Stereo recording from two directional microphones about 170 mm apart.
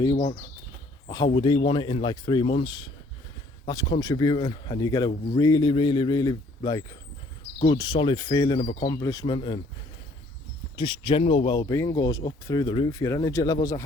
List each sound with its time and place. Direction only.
0.0 s speech: 30° left (ahead or behind)
10.8 s speech: 30° left (ahead or behind)
11.5 s speech: 20° left (ahead or behind)